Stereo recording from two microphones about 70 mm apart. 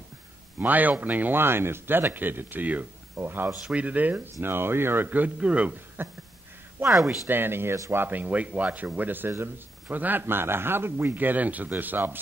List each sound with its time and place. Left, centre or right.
0.6 s speech: right
3.3 s speech: right
3.7 s speech: right
6.0 s speech: right
6.9 s speech: centre
7.2 s speech: right